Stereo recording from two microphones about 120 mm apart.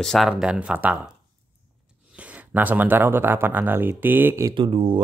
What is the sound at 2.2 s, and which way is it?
Speech, 10° right (ahead or behind).